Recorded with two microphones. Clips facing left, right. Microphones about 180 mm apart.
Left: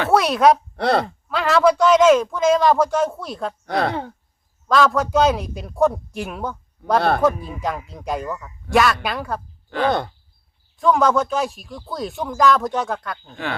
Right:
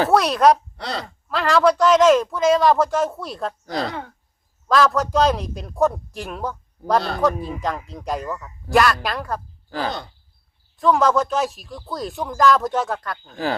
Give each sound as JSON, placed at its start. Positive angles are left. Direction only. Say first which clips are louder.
{"t": 0.1, "sound": "speech", "louder": "left 3 dB", "side_deg": 0}
{"t": 0.8, "sound": "speech", "louder": "left 10 dB", "side_deg": 60}
{"t": 1.3, "sound": "speech", "louder": "even", "side_deg": 0}
{"t": 3.7, "sound": "speech", "louder": "left 6 dB", "side_deg": 60}
{"t": 4.7, "sound": "speech", "louder": "left 1 dB", "side_deg": 0}
{"t": 10.8, "sound": "speech", "louder": "even", "side_deg": 0}
{"t": 13.3, "sound": "speech", "louder": "right 4 dB", "side_deg": -35}